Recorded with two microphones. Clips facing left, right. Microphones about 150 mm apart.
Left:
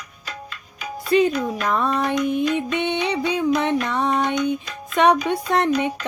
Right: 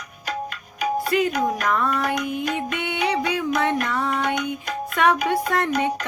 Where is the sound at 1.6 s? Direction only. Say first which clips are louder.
Left 1 dB; 25° left (ahead or behind).